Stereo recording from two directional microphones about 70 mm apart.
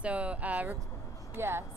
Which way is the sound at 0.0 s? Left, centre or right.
Centre.